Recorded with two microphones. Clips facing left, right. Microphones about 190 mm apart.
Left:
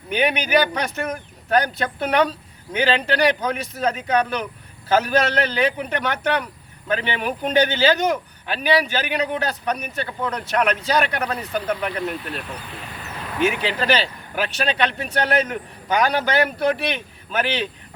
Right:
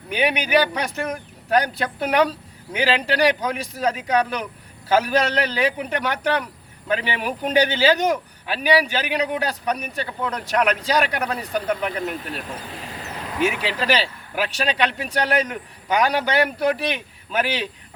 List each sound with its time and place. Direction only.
0.2 s speech: 10° right (ahead or behind)
12.9 s a sound: 35° right (ahead or behind)
13.4 s speech: 5° right (ahead or behind)